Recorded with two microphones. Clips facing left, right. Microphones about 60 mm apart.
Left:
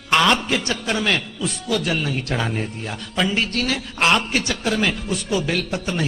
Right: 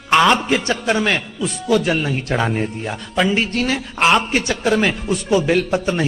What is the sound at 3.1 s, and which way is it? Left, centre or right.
A man's voice, centre.